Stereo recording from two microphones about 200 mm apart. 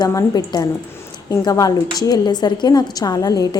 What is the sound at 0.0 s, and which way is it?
A woman's voice, 15° left (ahead or behind).